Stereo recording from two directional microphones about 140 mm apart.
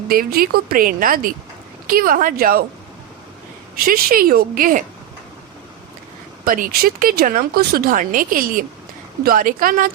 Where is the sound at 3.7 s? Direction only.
90° right.